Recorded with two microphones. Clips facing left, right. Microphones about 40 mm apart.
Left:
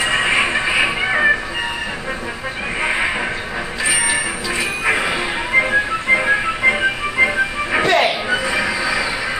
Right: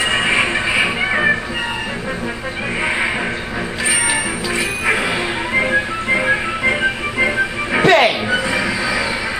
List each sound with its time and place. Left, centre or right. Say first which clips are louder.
0.0 s music: even; centre
2.8 s music: even; centre
4.8 s music: even; centre
7.8 s music: right 4 dB; centre
8.3 s music: right 1 dB; centre